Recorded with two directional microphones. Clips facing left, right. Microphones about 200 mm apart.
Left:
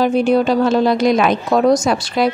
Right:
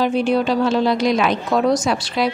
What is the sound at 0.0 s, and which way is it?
A woman's voice, 45° left (ahead or behind).